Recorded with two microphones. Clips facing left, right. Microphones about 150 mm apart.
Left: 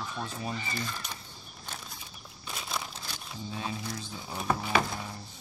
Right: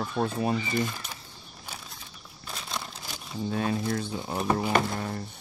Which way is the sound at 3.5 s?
60° right (ahead or behind).